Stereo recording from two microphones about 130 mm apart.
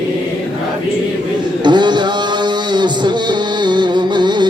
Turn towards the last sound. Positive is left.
turn(degrees=-35)  # may be behind; listen again after turning